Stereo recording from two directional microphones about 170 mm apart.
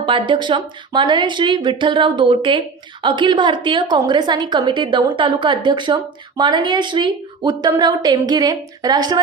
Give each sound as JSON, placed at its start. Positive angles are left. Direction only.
{"t": 0.0, "sound": "a woman's voice", "side_deg": -30}